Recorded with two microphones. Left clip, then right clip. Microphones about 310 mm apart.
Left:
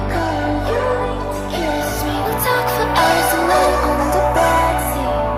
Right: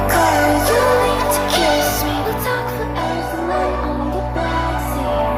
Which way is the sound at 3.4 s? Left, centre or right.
Left.